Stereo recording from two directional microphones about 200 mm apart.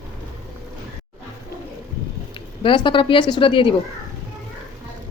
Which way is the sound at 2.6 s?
25° left (ahead or behind).